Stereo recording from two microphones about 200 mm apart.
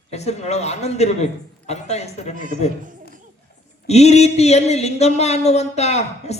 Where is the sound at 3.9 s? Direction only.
35° left (ahead or behind).